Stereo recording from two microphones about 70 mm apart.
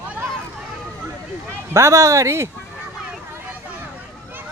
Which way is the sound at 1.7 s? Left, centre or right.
Right.